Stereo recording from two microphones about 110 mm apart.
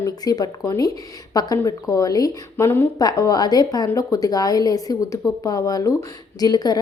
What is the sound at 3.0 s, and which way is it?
A woman's voice, 35° left (ahead or behind).